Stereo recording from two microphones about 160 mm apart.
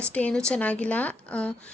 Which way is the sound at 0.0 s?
10° left (ahead or behind).